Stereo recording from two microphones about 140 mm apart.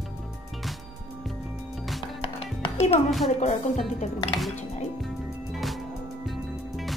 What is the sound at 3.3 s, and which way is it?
Speech, 55° left (ahead or behind).